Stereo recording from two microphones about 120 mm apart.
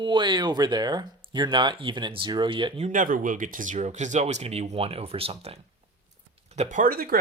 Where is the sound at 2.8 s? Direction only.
90° right; by 5.6 s 55° right (ahead or behind).